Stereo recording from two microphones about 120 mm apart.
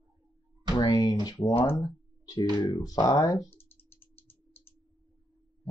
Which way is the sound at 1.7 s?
30° left (ahead or behind).